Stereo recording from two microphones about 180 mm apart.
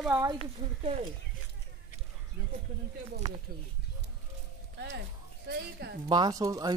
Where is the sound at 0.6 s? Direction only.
30° right (ahead or behind).